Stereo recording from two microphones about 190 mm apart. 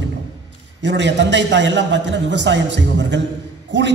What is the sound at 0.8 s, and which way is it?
A man's voice, 65° right (ahead or behind).